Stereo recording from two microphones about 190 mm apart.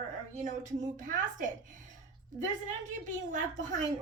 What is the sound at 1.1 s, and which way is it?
Speech, 45° right (ahead or behind).